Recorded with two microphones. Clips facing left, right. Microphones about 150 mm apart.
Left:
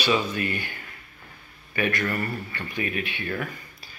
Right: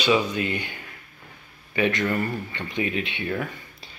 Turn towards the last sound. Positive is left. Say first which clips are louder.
# even
turn(degrees=-25)  # may be behind; listen again after turning